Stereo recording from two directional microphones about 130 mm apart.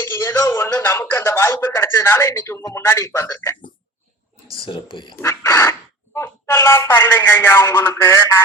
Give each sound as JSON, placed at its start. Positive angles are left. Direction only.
{"t": 0.0, "sound": "speech", "side_deg": 20}
{"t": 4.5, "sound": "speech", "side_deg": 40}
{"t": 5.1, "sound": "speech", "side_deg": 20}